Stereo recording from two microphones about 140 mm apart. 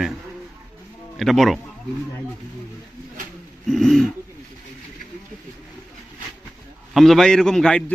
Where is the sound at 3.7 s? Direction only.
Centre (ahead or behind).